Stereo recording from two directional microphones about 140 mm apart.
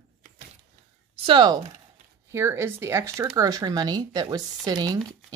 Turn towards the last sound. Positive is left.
turn(degrees=-30)  # may be behind; listen again after turning